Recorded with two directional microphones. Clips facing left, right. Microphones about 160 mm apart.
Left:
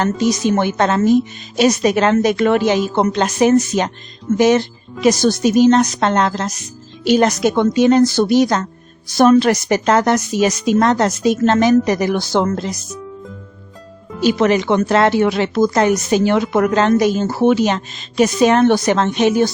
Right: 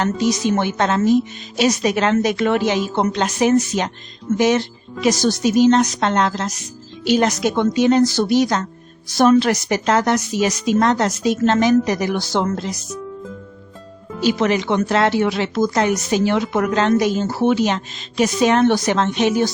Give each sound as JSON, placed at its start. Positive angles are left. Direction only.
{"t": 0.0, "sound": "speech", "side_deg": 50}
{"t": 14.3, "sound": "speech", "side_deg": 50}